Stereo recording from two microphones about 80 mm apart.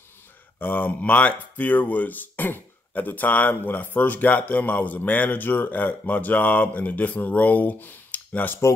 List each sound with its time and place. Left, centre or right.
0.6 s speech: left